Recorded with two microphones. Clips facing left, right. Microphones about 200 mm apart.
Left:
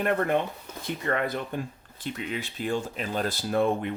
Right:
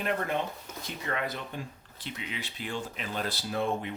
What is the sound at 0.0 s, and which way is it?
Speech, 55° left (ahead or behind).